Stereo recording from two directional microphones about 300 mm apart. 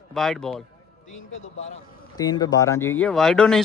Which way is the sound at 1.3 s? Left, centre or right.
Left.